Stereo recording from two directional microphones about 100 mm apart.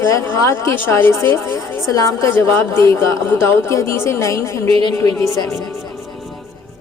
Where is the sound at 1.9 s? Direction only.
35° left (ahead or behind).